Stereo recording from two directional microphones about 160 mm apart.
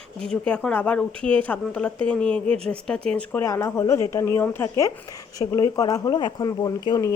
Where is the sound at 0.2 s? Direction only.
5° left (ahead or behind).